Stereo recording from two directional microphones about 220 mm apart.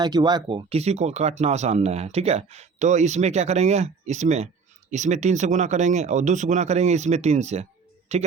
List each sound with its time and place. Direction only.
0.0 s speech: 20° right (ahead or behind)